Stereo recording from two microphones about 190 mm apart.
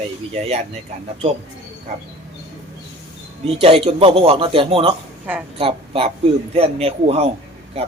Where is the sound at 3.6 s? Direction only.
30° right (ahead or behind).